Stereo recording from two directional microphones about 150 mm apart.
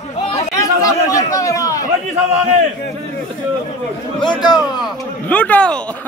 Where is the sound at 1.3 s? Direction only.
20° left (ahead or behind).